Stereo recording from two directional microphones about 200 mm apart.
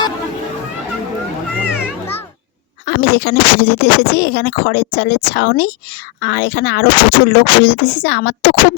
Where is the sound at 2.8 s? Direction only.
60° left (ahead or behind).